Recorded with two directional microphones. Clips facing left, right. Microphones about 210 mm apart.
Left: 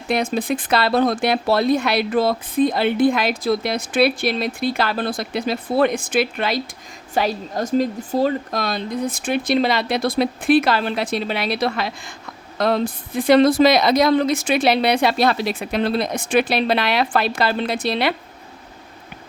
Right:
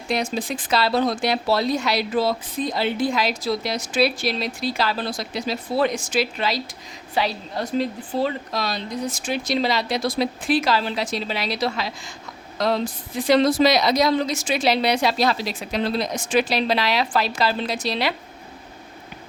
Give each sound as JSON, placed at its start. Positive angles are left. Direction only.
{"t": 0.1, "sound": "speech", "side_deg": 55}